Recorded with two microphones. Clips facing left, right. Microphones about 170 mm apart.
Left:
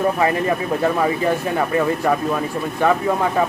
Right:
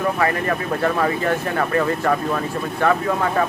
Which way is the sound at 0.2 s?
20° left (ahead or behind).